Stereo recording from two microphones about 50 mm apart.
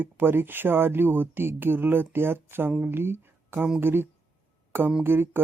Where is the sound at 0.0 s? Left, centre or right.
Right.